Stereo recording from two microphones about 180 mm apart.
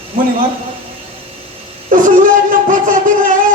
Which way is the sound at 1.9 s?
45° right (ahead or behind).